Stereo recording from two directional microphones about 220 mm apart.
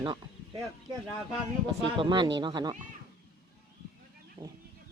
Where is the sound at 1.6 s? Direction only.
20° right (ahead or behind).